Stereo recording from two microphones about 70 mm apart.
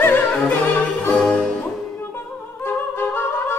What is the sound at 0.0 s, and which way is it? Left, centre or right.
Opera, left.